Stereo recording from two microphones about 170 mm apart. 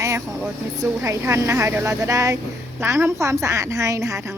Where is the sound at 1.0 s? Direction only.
15° right (ahead or behind).